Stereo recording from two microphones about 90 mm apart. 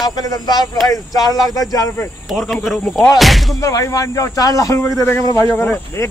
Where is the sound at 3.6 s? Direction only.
40° left (ahead or behind).